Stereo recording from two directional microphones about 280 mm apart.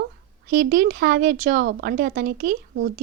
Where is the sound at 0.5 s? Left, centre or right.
Right.